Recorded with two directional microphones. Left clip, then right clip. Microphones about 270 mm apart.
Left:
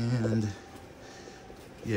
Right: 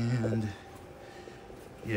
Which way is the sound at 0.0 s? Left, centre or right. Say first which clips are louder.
Left 2 dB; centre.